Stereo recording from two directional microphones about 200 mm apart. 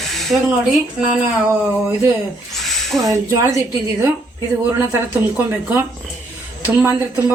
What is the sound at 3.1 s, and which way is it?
A woman's voice, 15° right (ahead or behind).